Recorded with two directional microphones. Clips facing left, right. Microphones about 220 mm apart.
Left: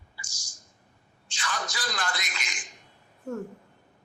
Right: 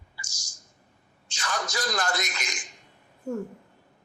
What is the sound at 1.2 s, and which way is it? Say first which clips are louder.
Speech: right 2 dB; 45° right (ahead or behind).